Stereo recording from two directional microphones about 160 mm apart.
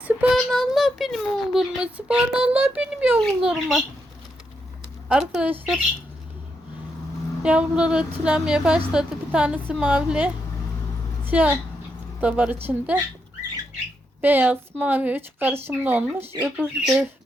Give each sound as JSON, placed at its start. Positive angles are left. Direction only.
{"t": 0.0, "sound": "child singing", "side_deg": -10}
{"t": 0.3, "sound": "a child's voice", "side_deg": 0}
{"t": 5.0, "sound": "a child's voice", "side_deg": -5}
{"t": 7.4, "sound": "a woman's voice", "side_deg": -5}
{"t": 11.3, "sound": "a woman's voice", "side_deg": -10}
{"t": 14.2, "sound": "a woman's voice", "side_deg": -10}